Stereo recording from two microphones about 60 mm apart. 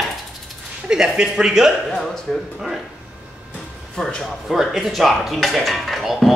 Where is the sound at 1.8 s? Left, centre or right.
Centre.